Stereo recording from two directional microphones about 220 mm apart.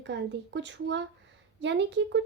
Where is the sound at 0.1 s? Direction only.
55° right (ahead or behind).